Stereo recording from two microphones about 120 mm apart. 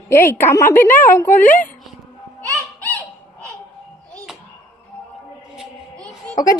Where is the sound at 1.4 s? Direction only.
90° left.